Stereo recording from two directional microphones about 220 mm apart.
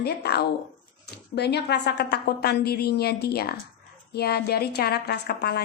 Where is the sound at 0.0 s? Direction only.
45° left (ahead or behind).